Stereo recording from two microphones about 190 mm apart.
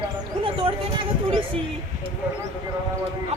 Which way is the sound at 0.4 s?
30° right (ahead or behind).